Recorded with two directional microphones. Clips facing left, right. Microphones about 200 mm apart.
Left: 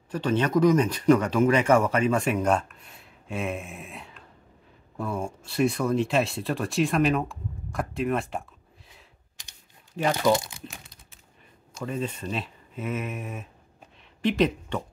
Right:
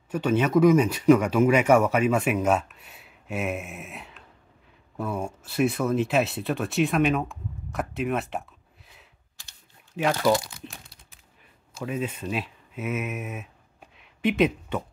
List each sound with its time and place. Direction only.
0.1 s speech: 5° right (ahead or behind)
9.4 s typing: 15° left (ahead or behind)
10.1 s speech: 20° left (ahead or behind)
10.7 s crumpling: centre (ahead or behind)
11.7 s speech: 5° right (ahead or behind)